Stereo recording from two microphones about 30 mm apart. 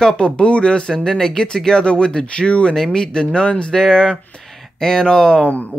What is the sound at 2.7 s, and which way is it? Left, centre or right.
Speech, left.